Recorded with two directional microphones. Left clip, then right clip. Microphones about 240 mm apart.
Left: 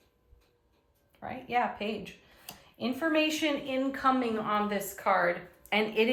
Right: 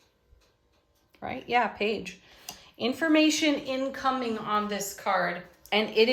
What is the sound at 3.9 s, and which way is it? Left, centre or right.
Speech, centre.